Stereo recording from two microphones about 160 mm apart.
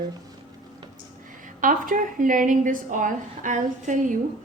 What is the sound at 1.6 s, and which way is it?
A woman's voice, 55° right (ahead or behind).